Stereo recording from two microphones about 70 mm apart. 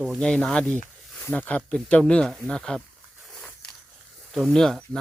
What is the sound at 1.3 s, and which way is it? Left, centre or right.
Speech, left.